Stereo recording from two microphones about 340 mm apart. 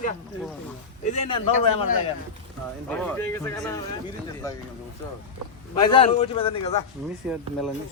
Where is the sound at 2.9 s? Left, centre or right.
Centre.